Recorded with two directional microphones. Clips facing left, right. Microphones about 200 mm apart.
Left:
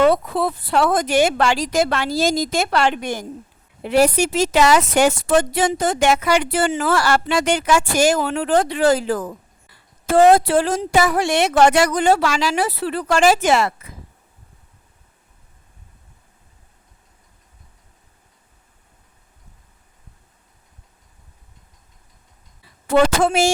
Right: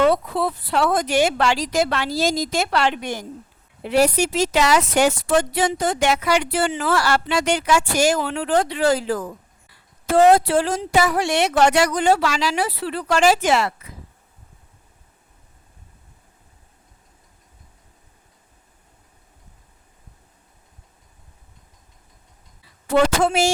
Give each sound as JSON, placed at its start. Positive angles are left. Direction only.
{"t": 0.0, "sound": "a woman's voice", "side_deg": 50}
{"t": 22.9, "sound": "a woman's voice", "side_deg": 50}